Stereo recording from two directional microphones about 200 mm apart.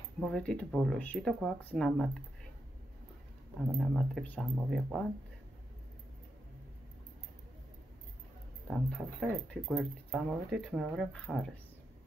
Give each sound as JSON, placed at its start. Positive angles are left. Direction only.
{"t": 0.2, "sound": "speech", "side_deg": 5}
{"t": 3.7, "sound": "speech", "side_deg": 0}
{"t": 8.6, "sound": "speech", "side_deg": 0}